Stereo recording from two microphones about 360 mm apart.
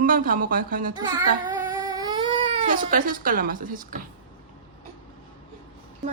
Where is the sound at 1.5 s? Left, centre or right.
Centre.